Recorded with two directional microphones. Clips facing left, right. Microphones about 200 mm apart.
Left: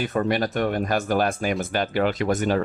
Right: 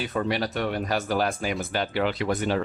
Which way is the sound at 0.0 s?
50° left (ahead or behind).